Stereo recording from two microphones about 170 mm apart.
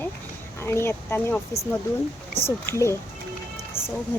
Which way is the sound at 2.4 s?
15° left (ahead or behind).